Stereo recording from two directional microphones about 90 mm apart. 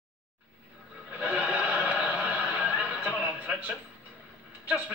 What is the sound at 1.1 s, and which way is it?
Snicker, 15° right (ahead or behind).